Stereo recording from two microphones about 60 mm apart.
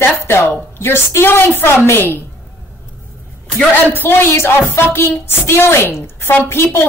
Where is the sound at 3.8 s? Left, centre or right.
Left.